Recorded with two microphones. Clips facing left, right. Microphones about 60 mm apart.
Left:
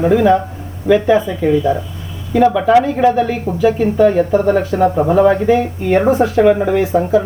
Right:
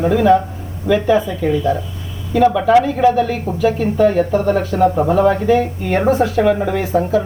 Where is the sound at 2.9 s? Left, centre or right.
Centre.